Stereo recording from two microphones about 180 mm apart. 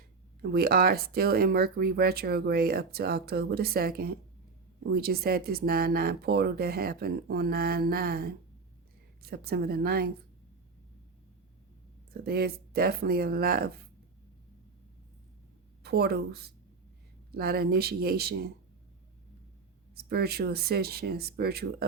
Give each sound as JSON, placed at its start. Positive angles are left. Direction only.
{"t": 0.4, "sound": "speech", "side_deg": -55}
{"t": 12.2, "sound": "speech", "side_deg": -60}
{"t": 15.8, "sound": "speech", "side_deg": -60}
{"t": 20.0, "sound": "speech", "side_deg": -60}